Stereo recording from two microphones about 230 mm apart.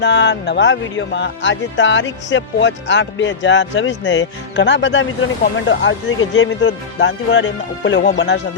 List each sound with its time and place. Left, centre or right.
0.0 s speech: left